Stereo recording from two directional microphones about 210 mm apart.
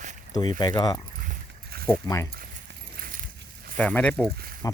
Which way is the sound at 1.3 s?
45° right (ahead or behind).